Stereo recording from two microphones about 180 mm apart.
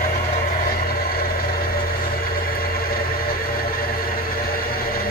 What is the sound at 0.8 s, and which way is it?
Vehicle, 55° left (ahead or behind).